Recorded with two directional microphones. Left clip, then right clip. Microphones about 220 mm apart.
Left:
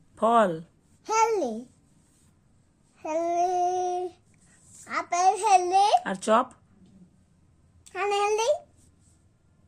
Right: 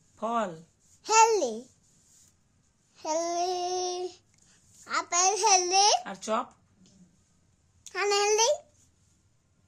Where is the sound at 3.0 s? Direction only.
25° right (ahead or behind).